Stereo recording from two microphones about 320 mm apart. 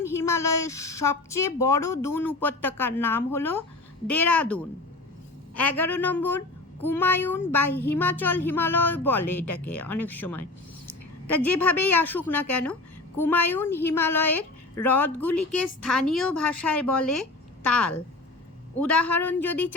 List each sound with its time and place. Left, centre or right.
0.0 s a woman's voice: centre
19.0 s a woman's voice: centre